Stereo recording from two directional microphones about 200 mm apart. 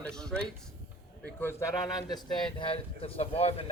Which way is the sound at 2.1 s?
25° left (ahead or behind).